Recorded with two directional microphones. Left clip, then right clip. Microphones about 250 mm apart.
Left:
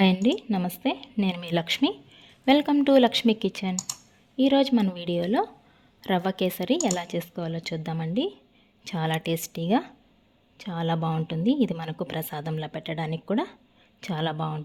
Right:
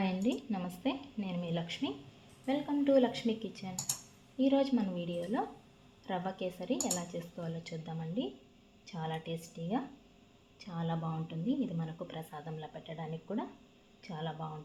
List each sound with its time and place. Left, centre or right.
0.0 s a woman's voice: left